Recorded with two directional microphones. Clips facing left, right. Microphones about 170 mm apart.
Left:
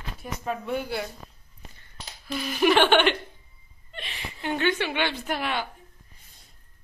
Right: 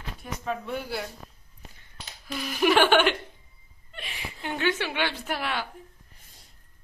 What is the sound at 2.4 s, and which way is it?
Speech, 5° right (ahead or behind).